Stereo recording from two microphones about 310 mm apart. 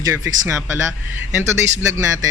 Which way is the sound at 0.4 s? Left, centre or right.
Centre.